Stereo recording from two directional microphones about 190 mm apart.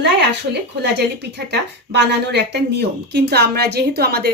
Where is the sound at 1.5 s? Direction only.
60° right (ahead or behind).